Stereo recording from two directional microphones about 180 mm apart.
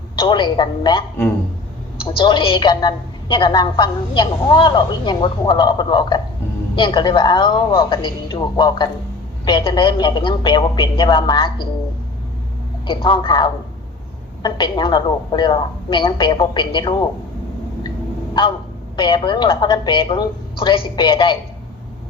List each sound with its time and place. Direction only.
0.2 s a woman's voice: 25° left (ahead or behind)
2.1 s a woman's voice: 25° left (ahead or behind)
12.9 s a woman's voice: 30° left (ahead or behind)
18.9 s a woman's voice: 25° left (ahead or behind)